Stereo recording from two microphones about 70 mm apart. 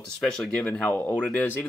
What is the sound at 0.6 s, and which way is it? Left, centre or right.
Speech, left.